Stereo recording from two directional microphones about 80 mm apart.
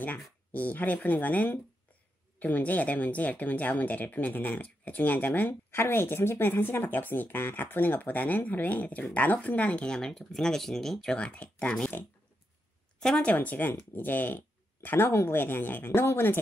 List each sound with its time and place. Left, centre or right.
0.5 s speech: left